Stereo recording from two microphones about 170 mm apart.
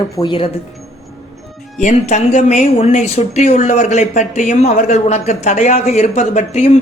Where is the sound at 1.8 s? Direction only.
45° left (ahead or behind).